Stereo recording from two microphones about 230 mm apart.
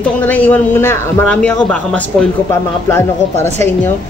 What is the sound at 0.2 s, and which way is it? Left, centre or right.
A man's voice, centre.